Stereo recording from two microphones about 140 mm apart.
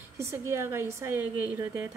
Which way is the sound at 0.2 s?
20° right (ahead or behind).